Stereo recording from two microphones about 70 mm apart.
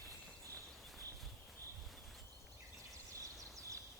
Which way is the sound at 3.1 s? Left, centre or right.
Right.